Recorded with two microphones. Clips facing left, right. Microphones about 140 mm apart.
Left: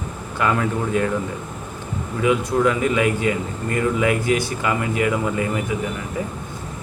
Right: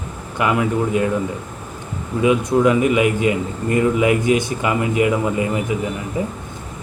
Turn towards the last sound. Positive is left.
turn(degrees=-20)  # may be behind; listen again after turning